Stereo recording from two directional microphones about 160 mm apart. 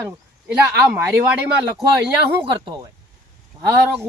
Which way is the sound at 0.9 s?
15° right (ahead or behind).